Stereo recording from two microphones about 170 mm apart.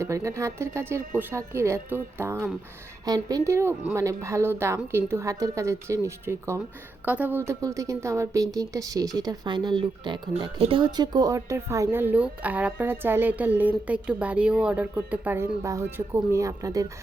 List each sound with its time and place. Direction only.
0.0 s speech: 15° right (ahead or behind)